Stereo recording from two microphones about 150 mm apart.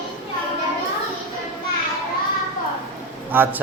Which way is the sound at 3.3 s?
15° right (ahead or behind).